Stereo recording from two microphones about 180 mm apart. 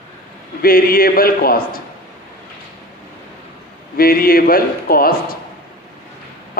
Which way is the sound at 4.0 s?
55° left (ahead or behind).